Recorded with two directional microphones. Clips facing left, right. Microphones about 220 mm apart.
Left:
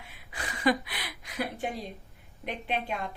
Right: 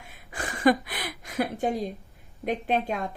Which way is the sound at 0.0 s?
45° right (ahead or behind).